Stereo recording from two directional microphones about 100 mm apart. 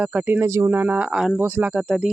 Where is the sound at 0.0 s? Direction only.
15° right (ahead or behind).